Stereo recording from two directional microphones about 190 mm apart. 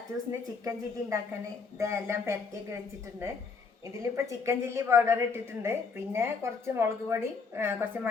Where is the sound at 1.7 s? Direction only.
15° right (ahead or behind).